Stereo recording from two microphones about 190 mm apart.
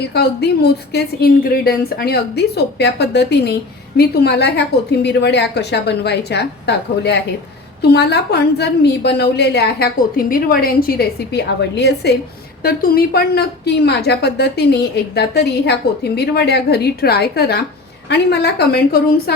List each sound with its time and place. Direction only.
0.1 s speech: 60° left (ahead or behind)